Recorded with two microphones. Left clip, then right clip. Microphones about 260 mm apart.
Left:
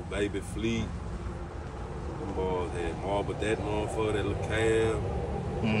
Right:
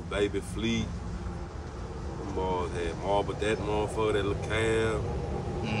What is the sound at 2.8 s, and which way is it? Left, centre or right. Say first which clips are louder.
Speech: right 2 dB; centre.